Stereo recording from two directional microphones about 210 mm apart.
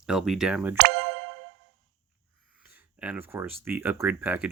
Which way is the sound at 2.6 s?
5° right (ahead or behind).